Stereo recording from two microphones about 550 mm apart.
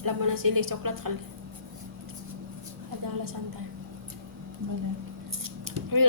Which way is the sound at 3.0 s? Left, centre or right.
Right.